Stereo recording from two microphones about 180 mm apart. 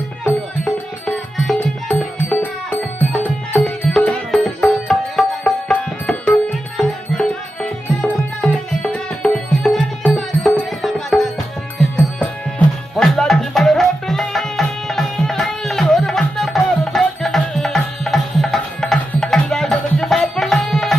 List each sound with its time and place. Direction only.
0.3 s music: 5° left (ahead or behind)